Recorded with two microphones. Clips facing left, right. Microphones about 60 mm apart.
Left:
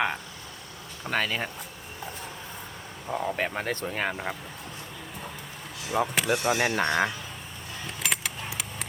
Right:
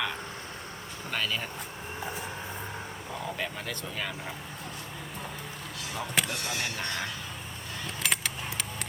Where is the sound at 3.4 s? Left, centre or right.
Left.